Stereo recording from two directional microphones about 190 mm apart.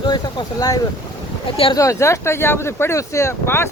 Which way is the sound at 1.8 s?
15° left (ahead or behind).